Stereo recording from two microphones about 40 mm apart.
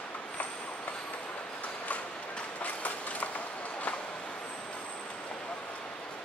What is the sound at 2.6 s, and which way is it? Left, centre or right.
Train, left.